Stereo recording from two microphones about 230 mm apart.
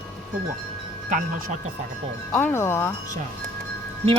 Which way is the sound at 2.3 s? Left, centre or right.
Centre.